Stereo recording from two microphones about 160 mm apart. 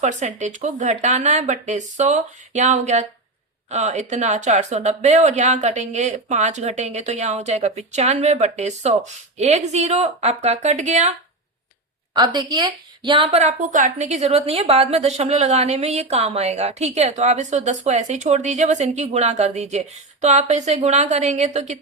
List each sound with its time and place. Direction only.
0.0 s speech: 50° right (ahead or behind)
12.1 s a woman's voice: 25° right (ahead or behind)
13.3 s speech: 45° right (ahead or behind)